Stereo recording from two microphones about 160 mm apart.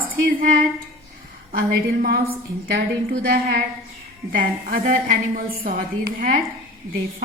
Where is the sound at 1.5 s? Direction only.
65° right (ahead or behind).